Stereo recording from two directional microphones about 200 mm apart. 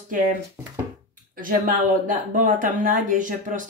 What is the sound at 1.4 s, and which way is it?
A woman's voice, 45° right (ahead or behind).